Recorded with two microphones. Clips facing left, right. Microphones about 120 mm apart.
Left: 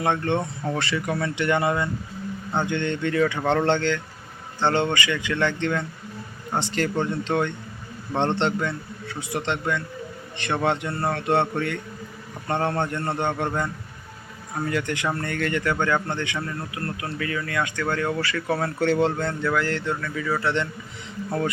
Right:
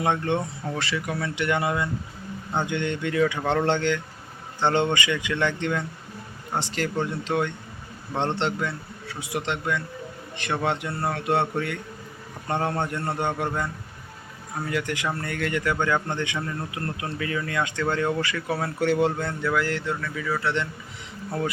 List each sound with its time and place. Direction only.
0.0 s speech: 10° right (ahead or behind)
0.6 s a man's voice: centre (ahead or behind)
14.7 s speech: 5° right (ahead or behind)